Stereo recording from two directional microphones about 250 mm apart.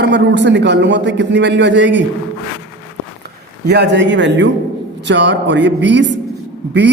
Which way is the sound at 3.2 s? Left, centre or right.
Right.